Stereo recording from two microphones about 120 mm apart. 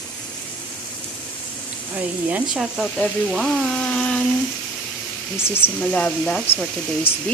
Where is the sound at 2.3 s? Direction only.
5° right (ahead or behind).